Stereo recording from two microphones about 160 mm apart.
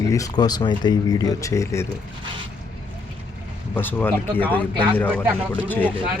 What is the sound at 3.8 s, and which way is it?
Speech, 10° left (ahead or behind).